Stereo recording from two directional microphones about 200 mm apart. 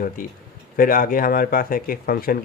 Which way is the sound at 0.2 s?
45° left (ahead or behind).